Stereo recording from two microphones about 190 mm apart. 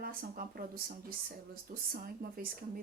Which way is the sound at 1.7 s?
50° right (ahead or behind).